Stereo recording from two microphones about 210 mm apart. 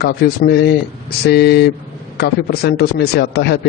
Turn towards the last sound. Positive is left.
turn(degrees=50)  # may be behind; listen again after turning